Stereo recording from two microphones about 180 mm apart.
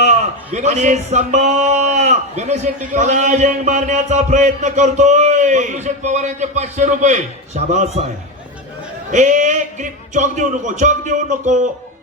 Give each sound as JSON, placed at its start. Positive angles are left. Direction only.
{"t": 0.0, "sound": "speech", "side_deg": -40}
{"t": 9.1, "sound": "speech", "side_deg": -45}